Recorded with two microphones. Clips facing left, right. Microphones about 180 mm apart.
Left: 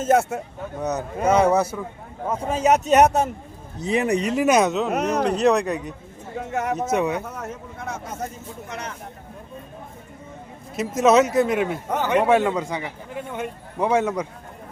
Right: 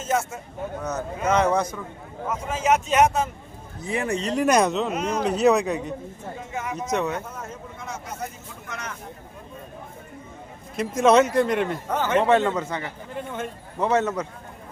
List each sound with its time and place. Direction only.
0.0 s speech: 60° left (ahead or behind)
0.8 s speech: 15° left (ahead or behind)
2.2 s speech: 30° left (ahead or behind)
3.8 s speech: 20° left (ahead or behind)
4.3 s speech: 5° left (ahead or behind)
4.9 s speech: 65° left (ahead or behind)
5.2 s speech: 5° right (ahead or behind)
6.4 s speech: 65° left (ahead or behind)
6.9 s speech: 10° left (ahead or behind)
7.4 s speech: 60° left (ahead or behind)
10.8 s speech: 5° left (ahead or behind)
11.9 s speech: 15° left (ahead or behind)